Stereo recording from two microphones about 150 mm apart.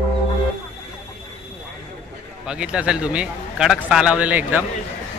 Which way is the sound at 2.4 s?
5° right (ahead or behind).